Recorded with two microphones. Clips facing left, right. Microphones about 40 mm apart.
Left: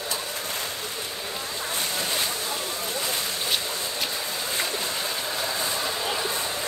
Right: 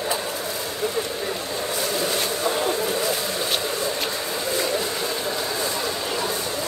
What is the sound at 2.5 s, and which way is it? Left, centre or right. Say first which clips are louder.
Boat: right 8 dB; right.